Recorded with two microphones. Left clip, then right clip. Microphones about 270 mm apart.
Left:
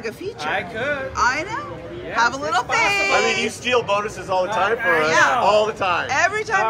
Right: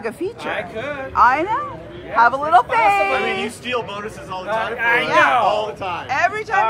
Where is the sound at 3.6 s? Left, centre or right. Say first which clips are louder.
Left 5 dB; centre.